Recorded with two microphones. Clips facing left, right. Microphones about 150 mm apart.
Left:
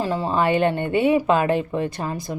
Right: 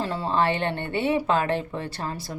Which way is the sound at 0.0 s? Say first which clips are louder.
Left 3 dB; 10° left (ahead or behind).